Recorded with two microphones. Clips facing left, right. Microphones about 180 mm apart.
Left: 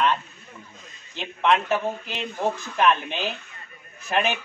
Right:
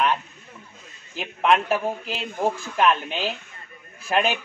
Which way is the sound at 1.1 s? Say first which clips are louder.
Right 1 dB; 5° right (ahead or behind).